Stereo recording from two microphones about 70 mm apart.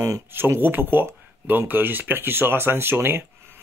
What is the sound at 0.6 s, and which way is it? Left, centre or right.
Speech, right.